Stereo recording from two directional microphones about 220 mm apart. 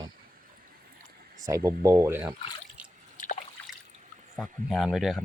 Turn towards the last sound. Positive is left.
turn(degrees=0)  # may be behind; listen again after turning